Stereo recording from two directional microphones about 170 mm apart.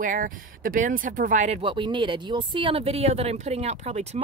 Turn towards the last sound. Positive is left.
turn(degrees=-40)  # may be behind; listen again after turning